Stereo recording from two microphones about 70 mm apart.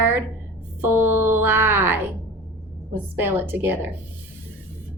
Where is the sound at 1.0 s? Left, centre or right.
Right.